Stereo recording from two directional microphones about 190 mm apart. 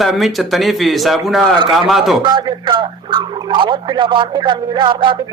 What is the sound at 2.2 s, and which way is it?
Speech, 25° right (ahead or behind).